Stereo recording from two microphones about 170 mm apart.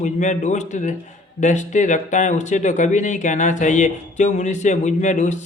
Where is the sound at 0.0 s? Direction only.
45° left (ahead or behind).